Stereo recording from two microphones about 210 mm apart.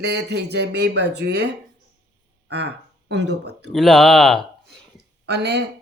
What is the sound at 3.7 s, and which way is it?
Speech, centre (ahead or behind).